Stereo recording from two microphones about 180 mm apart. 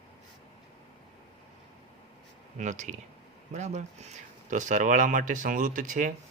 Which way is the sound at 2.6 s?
40° right (ahead or behind).